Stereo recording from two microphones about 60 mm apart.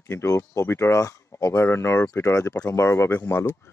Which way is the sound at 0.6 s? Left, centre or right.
Left.